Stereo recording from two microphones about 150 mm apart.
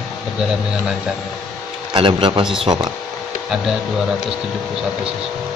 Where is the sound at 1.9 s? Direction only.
30° right (ahead or behind).